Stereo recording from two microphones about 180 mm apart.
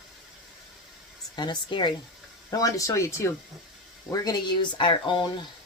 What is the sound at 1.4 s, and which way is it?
Speech, 25° left (ahead or behind).